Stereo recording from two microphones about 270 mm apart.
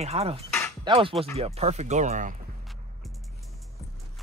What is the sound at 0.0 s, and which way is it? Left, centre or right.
Speech, right.